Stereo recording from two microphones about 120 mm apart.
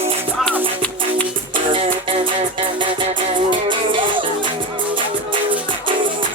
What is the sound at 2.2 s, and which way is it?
Music, 45° right (ahead or behind).